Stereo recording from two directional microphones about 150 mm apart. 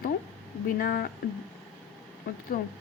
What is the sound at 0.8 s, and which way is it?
Speech, 70° left (ahead or behind).